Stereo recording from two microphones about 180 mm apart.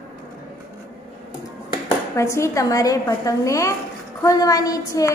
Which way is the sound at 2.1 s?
15° left (ahead or behind).